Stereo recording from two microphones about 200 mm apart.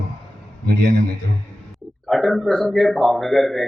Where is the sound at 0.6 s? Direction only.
50° right (ahead or behind).